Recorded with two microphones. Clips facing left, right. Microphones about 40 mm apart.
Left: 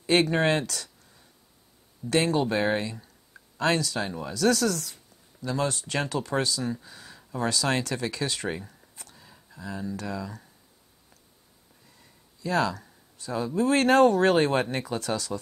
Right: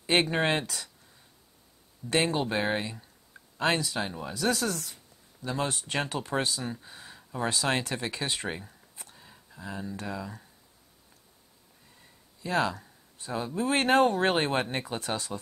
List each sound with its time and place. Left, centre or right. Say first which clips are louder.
0.0 s speech: left 3 dB; right
2.0 s speech: left 3 dB; right; by 9.0 s centre
9.0 s a sound: even; centre
9.6 s speech: left 3 dB; centre
12.4 s speech: left 2 dB; right